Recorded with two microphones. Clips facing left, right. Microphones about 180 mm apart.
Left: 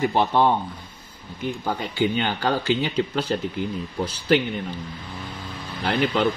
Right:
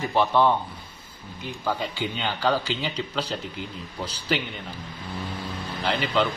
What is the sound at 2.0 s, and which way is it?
Speech, 50° left (ahead or behind).